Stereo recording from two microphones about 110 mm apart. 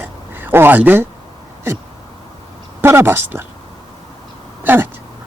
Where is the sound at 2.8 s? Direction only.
20° right (ahead or behind).